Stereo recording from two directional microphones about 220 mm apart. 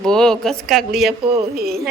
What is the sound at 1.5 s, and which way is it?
Speech, 45° right (ahead or behind).